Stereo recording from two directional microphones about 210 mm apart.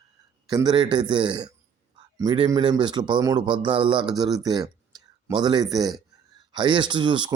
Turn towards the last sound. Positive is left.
turn(degrees=-20)  # may be behind; listen again after turning